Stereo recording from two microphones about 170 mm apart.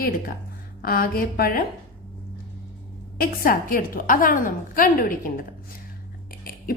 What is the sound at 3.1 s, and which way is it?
A woman's voice, 60° left (ahead or behind).